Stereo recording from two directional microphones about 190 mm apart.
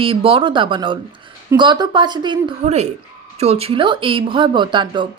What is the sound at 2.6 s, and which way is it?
A woman's voice, 35° right (ahead or behind).